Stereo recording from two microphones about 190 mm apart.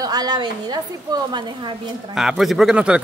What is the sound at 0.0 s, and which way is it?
A woman's voice, 20° right (ahead or behind).